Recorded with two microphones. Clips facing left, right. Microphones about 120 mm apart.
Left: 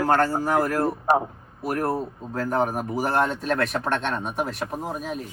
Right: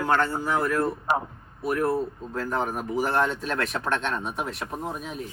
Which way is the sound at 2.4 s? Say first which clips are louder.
Left 4 dB; 35° left (ahead or behind).